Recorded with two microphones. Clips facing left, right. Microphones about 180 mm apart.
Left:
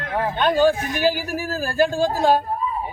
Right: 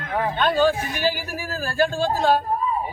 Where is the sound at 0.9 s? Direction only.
45° left (ahead or behind).